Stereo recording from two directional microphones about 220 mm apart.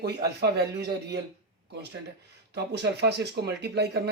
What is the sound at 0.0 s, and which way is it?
Speech, 50° right (ahead or behind).